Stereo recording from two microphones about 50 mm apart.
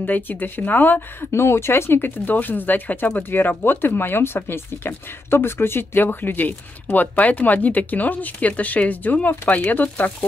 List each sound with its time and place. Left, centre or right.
0.0 s speech: left
1.3 s speech: left
6.0 s speech: left